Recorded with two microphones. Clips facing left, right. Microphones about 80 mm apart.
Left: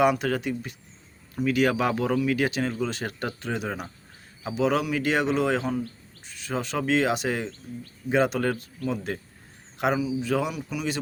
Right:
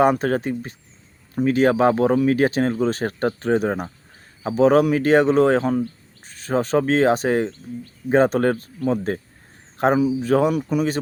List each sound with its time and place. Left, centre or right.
0.0 s speech: right